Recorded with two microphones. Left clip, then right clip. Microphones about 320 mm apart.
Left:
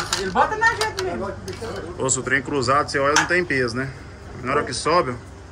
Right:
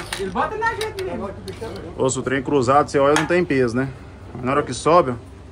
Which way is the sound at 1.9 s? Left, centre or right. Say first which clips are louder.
Right 1 dB; centre.